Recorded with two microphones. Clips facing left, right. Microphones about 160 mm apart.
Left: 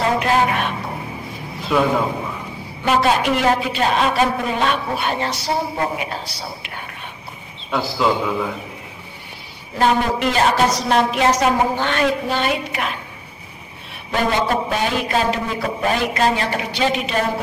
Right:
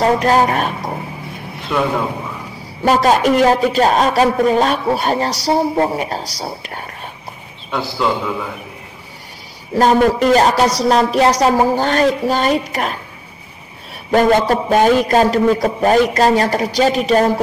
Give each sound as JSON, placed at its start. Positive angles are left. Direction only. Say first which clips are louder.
{"t": 0.0, "sound": "a woman's voice", "louder": "right 4 dB", "side_deg": -40}
{"t": 1.6, "sound": "a sound", "louder": "even", "side_deg": 0}
{"t": 2.8, "sound": "a man's voice", "louder": "right 4 dB", "side_deg": -40}
{"t": 7.7, "sound": "a man's voice", "louder": "even", "side_deg": 0}
{"t": 9.8, "sound": "a man's voice", "louder": "right 6 dB", "side_deg": -40}
{"t": 14.1, "sound": "a man's voice", "louder": "right 7 dB", "side_deg": -40}